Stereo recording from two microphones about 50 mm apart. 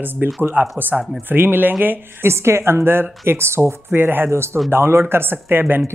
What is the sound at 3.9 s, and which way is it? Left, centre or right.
A woman's voice, right.